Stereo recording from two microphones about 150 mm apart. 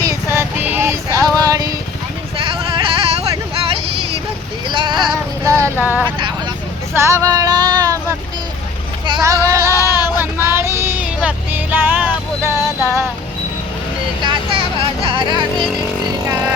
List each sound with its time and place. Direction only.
0.0 s music: 20° right (ahead or behind)
2.4 s a sound: 35° right (ahead or behind)
4.7 s a sound: 35° right (ahead or behind)
5.4 s female singing: 20° right (ahead or behind)
5.8 s speech: 10° right (ahead or behind)
6.9 s female singing: 20° right (ahead or behind)
9.2 s female singing: 20° right (ahead or behind)
9.7 s a sound: 20° left (ahead or behind)
10.2 s music: 15° right (ahead or behind)
15.0 s speech: 35° right (ahead or behind)